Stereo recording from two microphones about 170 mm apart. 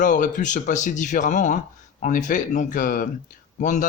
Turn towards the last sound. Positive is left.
turn(degrees=50)  # may be behind; listen again after turning